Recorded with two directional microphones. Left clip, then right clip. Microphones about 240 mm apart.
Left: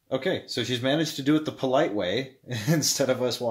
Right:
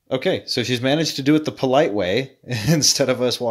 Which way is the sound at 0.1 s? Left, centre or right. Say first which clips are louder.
Right 6 dB; right.